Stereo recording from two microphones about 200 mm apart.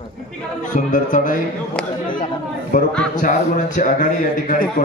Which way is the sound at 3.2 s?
40° left (ahead or behind).